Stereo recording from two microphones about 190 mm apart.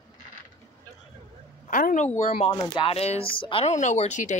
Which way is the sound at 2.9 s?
35° left (ahead or behind).